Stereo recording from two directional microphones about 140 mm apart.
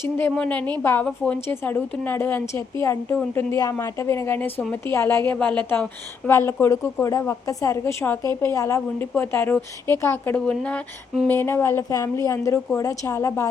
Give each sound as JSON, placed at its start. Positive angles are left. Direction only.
{"t": 0.2, "sound": "a woman's voice", "side_deg": 15}
{"t": 10.3, "sound": "a woman's voice", "side_deg": 5}